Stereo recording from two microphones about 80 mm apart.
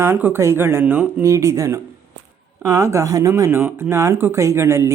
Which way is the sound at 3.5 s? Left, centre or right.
Right.